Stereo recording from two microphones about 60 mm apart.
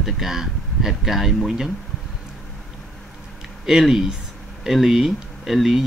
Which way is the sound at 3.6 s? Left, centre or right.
Centre.